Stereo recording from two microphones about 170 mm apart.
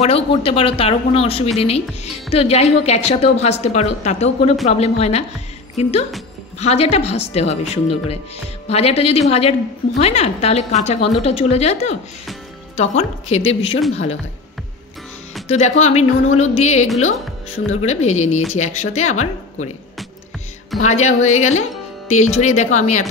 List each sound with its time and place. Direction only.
0.0 s a woman's voice: 35° left (ahead or behind)
15.4 s a woman's voice: 40° left (ahead or behind)
20.8 s speech: 40° left (ahead or behind)